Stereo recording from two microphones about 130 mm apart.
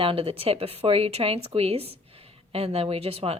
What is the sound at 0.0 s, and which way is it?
A woman's voice, 45° right (ahead or behind).